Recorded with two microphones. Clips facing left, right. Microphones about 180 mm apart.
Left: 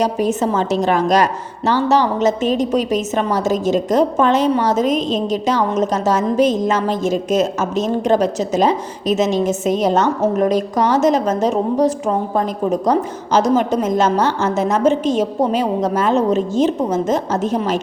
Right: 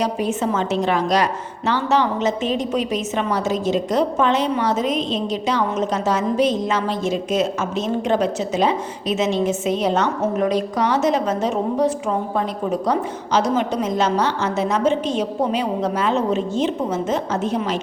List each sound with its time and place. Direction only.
0.0 s a woman's voice: 40° left (ahead or behind)